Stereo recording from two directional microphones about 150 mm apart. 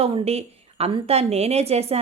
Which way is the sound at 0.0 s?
40° right (ahead or behind).